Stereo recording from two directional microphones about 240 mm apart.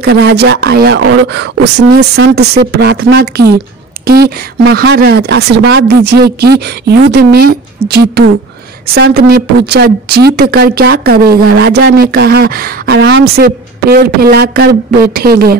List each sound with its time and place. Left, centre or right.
0.0 s a woman's voice: right